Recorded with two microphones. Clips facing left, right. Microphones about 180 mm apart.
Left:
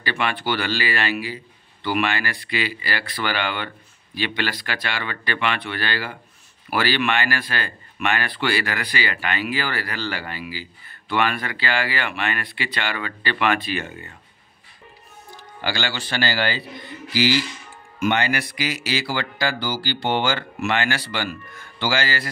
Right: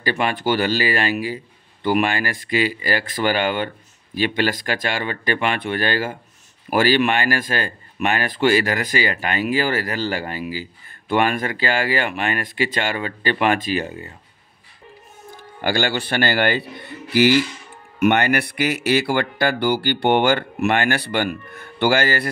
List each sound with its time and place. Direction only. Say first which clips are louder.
0.0 s speech: right 4 dB; 40° right (ahead or behind)
15.3 s speech: right 6 dB; 50° right (ahead or behind)